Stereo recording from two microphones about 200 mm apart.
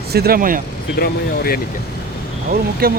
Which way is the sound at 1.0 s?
50° left (ahead or behind).